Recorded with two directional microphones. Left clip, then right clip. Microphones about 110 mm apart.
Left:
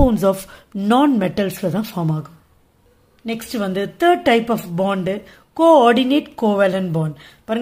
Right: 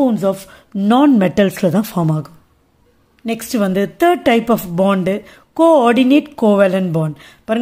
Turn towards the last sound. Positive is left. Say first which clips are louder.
# right 4 dB
turn(degrees=-40)  # may be behind; listen again after turning